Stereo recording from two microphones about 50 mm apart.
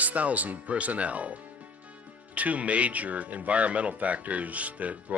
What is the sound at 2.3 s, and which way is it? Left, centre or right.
Speech, right.